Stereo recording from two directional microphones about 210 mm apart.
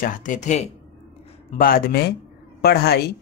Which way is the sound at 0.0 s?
40° left (ahead or behind).